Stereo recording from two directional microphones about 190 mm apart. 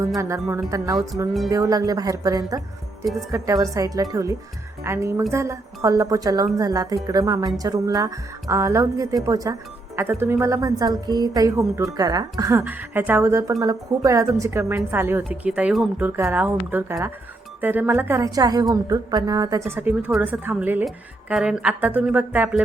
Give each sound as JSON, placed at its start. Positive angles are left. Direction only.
{"t": 0.2, "sound": "speech", "side_deg": -15}
{"t": 3.0, "sound": "speech", "side_deg": 0}
{"t": 3.3, "sound": "speech", "side_deg": -15}